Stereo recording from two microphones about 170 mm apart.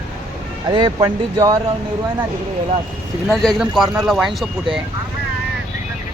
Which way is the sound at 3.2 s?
Centre (ahead or behind).